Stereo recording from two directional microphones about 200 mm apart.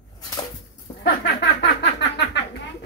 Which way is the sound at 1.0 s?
55° left (ahead or behind).